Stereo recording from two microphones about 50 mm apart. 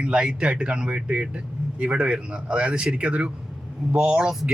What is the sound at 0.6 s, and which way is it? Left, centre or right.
Speech, right.